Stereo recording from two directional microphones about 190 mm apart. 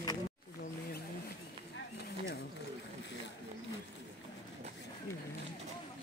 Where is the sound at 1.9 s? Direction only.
60° left (ahead or behind).